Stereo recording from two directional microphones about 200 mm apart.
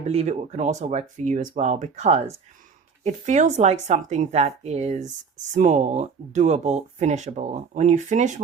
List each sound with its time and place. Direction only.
0.1 s speech: 35° right (ahead or behind)